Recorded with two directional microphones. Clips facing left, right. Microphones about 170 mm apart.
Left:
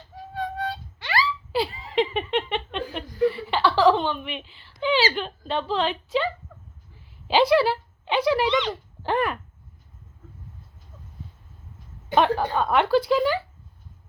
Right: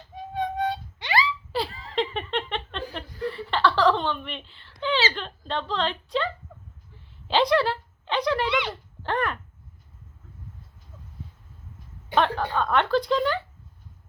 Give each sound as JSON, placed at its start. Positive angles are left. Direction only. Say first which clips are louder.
{"t": 0.2, "sound": "music", "louder": "right 3 dB", "side_deg": -20}
{"t": 1.5, "sound": "giggle", "louder": "left 4 dB", "side_deg": 0}
{"t": 4.8, "sound": "speech", "louder": "left 3 dB", "side_deg": 10}
{"t": 7.3, "sound": "a sound", "louder": "left 3 dB", "side_deg": 5}
{"t": 8.4, "sound": "speech", "louder": "left 3 dB", "side_deg": -10}
{"t": 8.7, "sound": "speech", "louder": "left 3 dB", "side_deg": 10}
{"t": 12.1, "sound": "speech", "louder": "left 3 dB", "side_deg": 10}